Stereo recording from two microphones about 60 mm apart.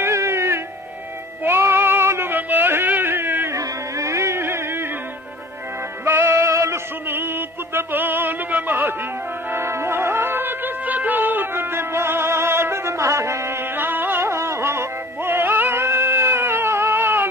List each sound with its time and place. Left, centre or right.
0.0 s music: right
3.4 s a sound: right
6.0 s music: right
9.5 s music: right
14.2 s music: right